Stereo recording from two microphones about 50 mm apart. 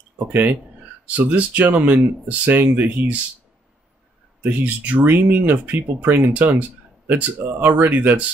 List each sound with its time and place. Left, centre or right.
0.3 s speech: right
1.0 s speech: right
4.4 s speech: right